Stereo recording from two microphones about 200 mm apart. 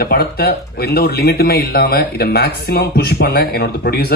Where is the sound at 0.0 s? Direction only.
50° left (ahead or behind).